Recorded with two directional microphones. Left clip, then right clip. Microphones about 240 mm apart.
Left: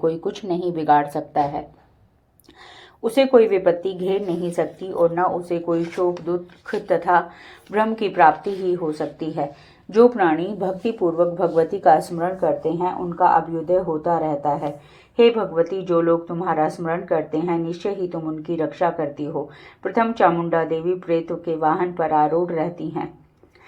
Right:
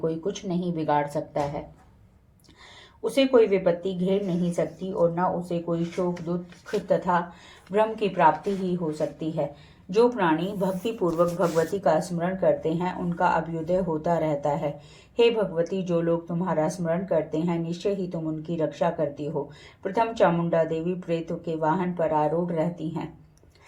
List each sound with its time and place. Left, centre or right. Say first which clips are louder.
0.0 s speech: left 6 dB; centre
3.0 s speech: left 5 dB; centre
10.0 s speech: left 6 dB; centre